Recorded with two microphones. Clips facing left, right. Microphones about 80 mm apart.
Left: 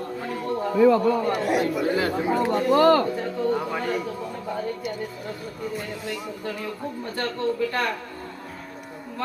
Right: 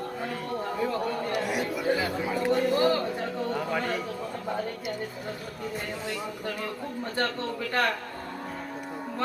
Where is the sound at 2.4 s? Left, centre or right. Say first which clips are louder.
Left 4 dB; left.